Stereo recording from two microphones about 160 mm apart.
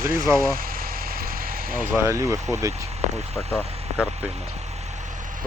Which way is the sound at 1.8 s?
15° right (ahead or behind).